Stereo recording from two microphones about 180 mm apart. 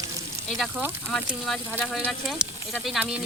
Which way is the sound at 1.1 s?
5° left (ahead or behind).